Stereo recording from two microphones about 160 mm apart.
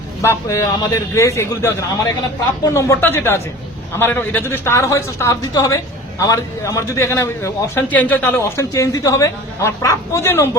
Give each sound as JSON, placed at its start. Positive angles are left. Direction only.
{"t": 0.2, "sound": "a man's voice", "side_deg": 20}